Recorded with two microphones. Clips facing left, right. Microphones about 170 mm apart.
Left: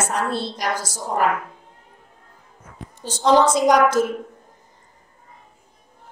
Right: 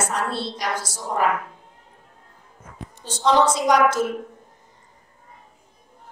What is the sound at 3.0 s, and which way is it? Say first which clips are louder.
A woman's voice: left 2 dB; 45° left (ahead or behind).